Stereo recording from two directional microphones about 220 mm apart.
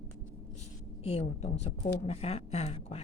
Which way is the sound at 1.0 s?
30° left (ahead or behind).